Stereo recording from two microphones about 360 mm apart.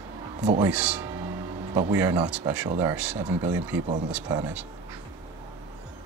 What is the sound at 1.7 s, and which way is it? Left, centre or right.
Speech, centre.